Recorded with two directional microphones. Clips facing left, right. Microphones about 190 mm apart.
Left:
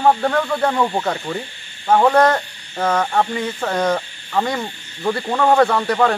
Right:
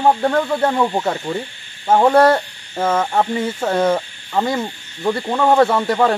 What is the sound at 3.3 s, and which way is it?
Speech, 25° right (ahead or behind).